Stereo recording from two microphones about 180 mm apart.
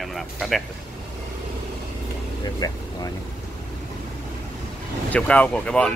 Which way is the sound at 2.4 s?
20° left (ahead or behind).